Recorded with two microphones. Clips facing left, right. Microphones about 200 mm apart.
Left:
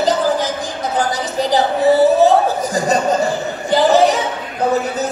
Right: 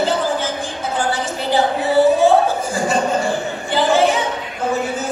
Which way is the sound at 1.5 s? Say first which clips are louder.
Left 2 dB; 40° left (ahead or behind).